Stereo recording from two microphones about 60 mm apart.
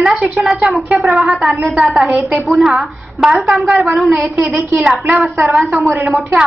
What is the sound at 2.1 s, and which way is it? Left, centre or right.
Speech, centre.